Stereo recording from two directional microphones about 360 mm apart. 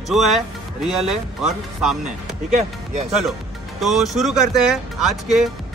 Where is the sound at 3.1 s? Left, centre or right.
Centre.